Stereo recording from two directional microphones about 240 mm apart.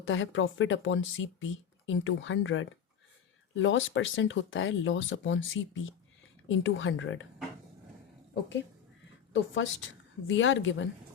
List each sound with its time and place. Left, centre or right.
0.0 s speech: left
9.3 s speech: left